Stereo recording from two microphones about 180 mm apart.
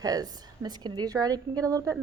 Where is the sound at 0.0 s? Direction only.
20° right (ahead or behind).